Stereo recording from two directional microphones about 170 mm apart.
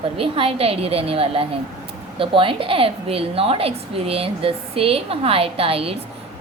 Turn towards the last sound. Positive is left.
turn(degrees=-35)  # may be behind; listen again after turning